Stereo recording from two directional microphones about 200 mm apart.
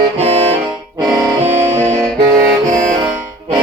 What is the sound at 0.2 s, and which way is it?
Saxophone, 30° right (ahead or behind).